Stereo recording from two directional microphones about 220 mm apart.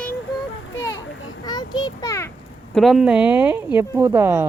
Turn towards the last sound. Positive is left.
turn(degrees=-10)  # may be behind; listen again after turning